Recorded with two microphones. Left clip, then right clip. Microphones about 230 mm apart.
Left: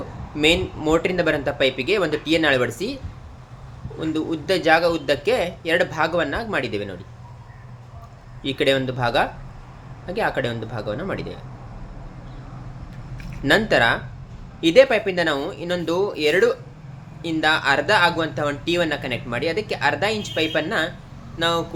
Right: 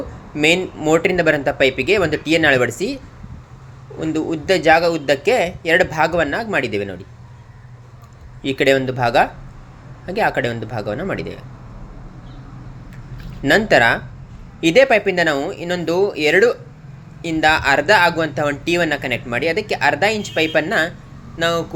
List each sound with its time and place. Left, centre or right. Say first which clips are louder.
0.3 s speech: right 3 dB; centre
4.0 s speech: right 4 dB; centre
8.4 s speech: right 4 dB; centre
13.4 s speech: right 4 dB; centre